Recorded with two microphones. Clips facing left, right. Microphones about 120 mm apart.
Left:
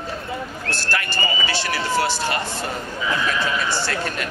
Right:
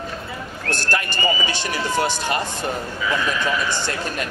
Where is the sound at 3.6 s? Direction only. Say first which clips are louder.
Left 1 dB; 20° right (ahead or behind).